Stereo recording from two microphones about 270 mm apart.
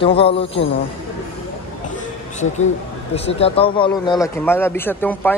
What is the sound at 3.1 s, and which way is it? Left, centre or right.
Speech, left.